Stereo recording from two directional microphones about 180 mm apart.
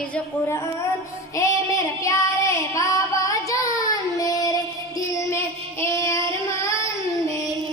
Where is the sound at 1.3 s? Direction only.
15° left (ahead or behind).